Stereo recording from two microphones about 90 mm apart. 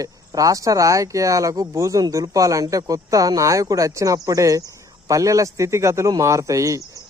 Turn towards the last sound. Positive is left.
turn(degrees=-35)  # may be behind; listen again after turning